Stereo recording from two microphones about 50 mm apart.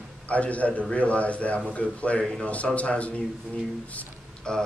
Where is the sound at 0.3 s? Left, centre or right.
Left.